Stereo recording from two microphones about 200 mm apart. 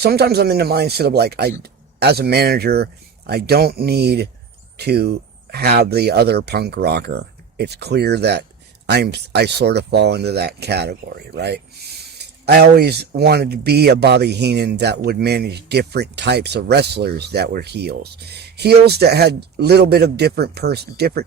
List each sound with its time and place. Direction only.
0.0 s speech: 55° right (ahead or behind)